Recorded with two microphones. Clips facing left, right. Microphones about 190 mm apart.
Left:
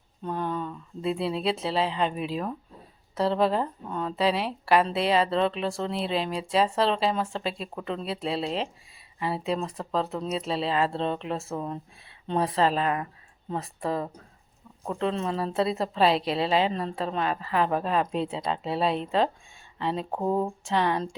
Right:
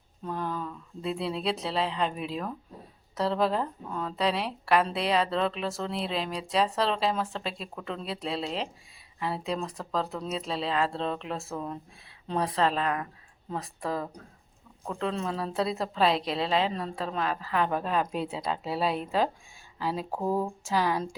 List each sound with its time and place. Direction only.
0.3 s a sound: centre (ahead or behind)
0.7 s a woman's voice: 5° left (ahead or behind)
20.1 s speech: 20° left (ahead or behind)
20.7 s a woman's voice: 5° right (ahead or behind)